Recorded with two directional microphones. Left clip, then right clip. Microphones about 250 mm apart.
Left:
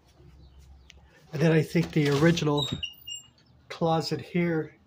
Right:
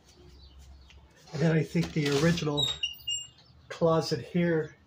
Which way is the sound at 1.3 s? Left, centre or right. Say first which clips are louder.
Left 4 dB; centre.